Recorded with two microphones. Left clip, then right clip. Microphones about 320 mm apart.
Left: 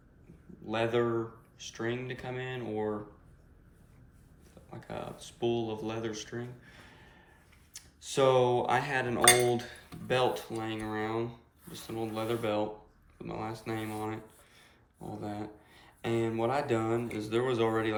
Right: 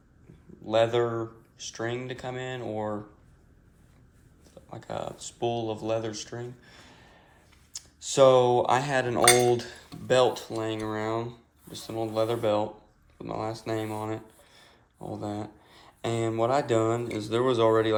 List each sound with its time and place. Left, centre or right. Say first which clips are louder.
0.6 s cutlery: right 6 dB; centre
4.7 s cutlery: right 6 dB; centre
13.2 s speech: right 6 dB; centre
15.1 s cutlery: right 5 dB; centre